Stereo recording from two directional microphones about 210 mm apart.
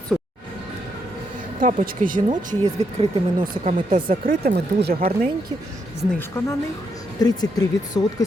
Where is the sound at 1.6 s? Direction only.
40° right (ahead or behind).